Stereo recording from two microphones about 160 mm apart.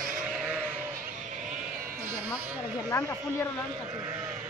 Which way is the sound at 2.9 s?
20° left (ahead or behind).